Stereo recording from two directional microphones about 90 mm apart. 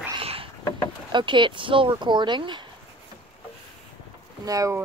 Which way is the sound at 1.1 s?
60° right (ahead or behind).